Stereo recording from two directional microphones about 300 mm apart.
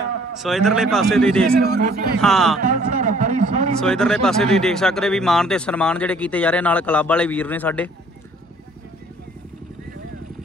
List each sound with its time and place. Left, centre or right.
0.4 s speech: centre
1.6 s speech: right
2.2 s speech: centre
2.6 s speech: right
3.8 s speech: centre